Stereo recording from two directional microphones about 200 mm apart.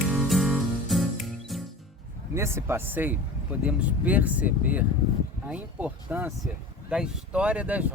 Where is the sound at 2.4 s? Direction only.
15° right (ahead or behind).